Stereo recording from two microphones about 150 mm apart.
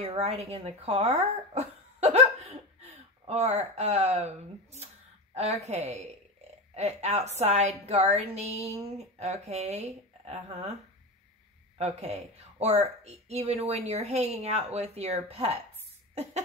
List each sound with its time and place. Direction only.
0.0 s a woman's voice: 45° right (ahead or behind)
11.8 s a woman's voice: 45° right (ahead or behind)